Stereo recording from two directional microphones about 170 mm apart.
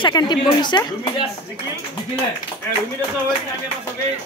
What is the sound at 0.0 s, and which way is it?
Speech, 25° left (ahead or behind).